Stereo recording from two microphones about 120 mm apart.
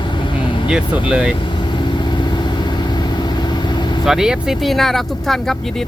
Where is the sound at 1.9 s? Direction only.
40° left (ahead or behind).